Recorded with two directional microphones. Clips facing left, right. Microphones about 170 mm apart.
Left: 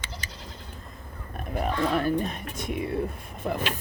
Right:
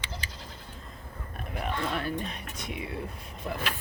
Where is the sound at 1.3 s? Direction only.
40° left (ahead or behind).